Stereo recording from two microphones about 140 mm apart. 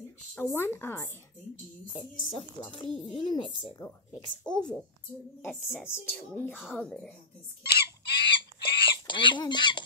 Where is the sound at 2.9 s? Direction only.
Centre (ahead or behind).